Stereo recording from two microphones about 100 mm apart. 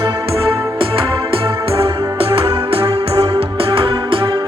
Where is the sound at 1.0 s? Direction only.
65° right (ahead or behind).